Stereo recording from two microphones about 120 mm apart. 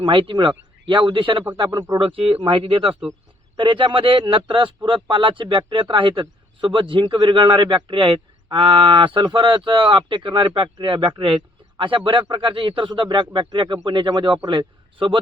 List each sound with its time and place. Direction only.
0.0 s a man's voice: 45° right (ahead or behind)